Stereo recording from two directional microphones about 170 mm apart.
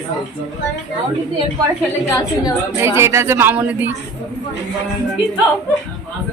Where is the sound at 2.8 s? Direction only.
15° right (ahead or behind).